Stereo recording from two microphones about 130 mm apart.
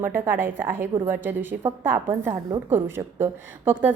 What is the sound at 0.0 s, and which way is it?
A woman's voice, 15° right (ahead or behind).